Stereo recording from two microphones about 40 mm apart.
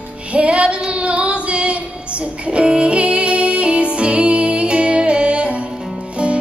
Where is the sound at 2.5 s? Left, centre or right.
Right.